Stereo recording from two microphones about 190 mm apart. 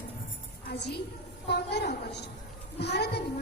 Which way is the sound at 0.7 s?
60° left (ahead or behind).